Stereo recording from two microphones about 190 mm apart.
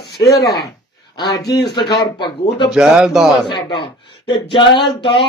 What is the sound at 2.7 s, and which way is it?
Speech, 5° right (ahead or behind).